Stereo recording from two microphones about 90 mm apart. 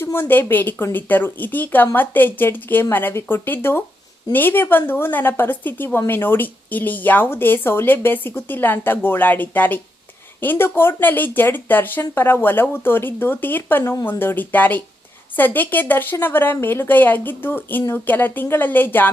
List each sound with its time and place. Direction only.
0.0 s a woman's voice: 25° left (ahead or behind)